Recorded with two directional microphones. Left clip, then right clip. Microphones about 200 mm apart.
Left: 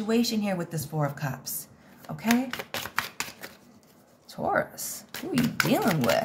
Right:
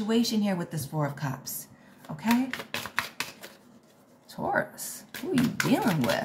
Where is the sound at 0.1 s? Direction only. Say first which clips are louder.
Left 1 dB; 30° left (ahead or behind).